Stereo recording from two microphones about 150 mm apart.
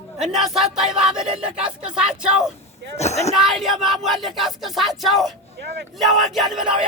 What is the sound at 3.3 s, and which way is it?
Speech, centre (ahead or behind).